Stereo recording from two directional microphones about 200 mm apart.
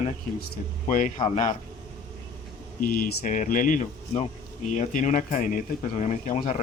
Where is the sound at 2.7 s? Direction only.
45° left (ahead or behind).